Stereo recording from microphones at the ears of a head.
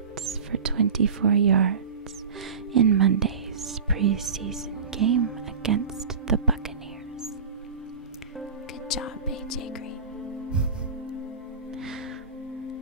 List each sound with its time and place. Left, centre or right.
0.2 s speech: right
8.8 s whispering: left